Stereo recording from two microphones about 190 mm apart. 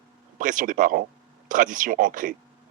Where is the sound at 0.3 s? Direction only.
45° right (ahead or behind).